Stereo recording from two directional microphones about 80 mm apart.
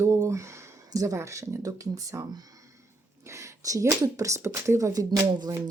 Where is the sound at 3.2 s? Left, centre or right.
Right.